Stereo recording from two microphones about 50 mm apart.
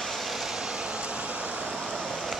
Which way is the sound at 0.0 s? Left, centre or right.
Centre.